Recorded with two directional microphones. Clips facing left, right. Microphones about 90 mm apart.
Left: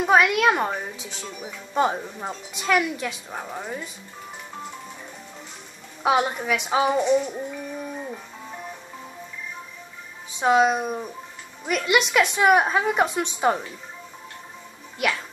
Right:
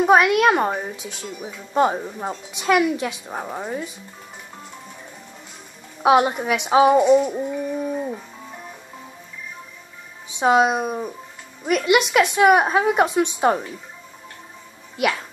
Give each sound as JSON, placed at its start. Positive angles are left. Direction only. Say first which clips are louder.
{"t": 0.0, "sound": "speech", "louder": "right 3 dB", "side_deg": -10}
{"t": 6.0, "sound": "speech", "louder": "right 5 dB", "side_deg": -10}
{"t": 10.4, "sound": "speech", "louder": "right 2 dB", "side_deg": -10}
{"t": 15.0, "sound": "speech", "louder": "right 3 dB", "side_deg": -5}